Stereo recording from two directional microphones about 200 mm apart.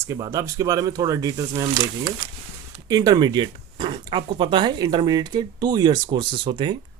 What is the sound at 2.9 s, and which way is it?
Speech, 20° right (ahead or behind).